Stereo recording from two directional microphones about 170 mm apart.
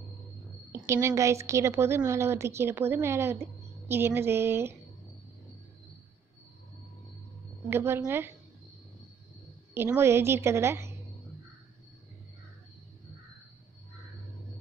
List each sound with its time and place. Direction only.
0.7 s a woman's voice: 15° right (ahead or behind)
7.7 s a woman's voice: 15° right (ahead or behind)
9.8 s a woman's voice: 15° right (ahead or behind)